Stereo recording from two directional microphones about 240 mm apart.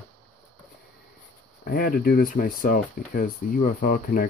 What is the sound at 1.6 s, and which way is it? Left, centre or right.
Speech, left.